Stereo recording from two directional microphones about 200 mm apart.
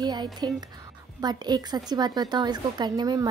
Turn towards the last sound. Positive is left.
turn(degrees=-20)  # may be behind; listen again after turning